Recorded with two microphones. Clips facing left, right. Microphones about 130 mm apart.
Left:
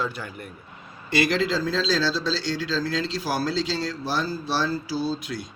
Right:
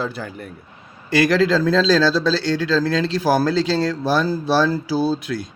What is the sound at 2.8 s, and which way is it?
Speech, 60° right (ahead or behind).